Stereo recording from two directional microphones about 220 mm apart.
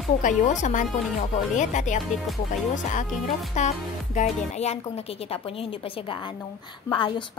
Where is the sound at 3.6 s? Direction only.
35° left (ahead or behind).